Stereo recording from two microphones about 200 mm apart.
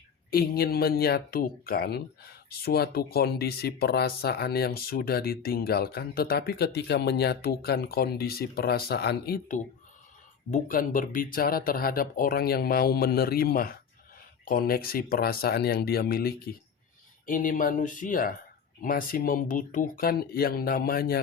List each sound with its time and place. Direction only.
0.3 s speech: 50° left (ahead or behind)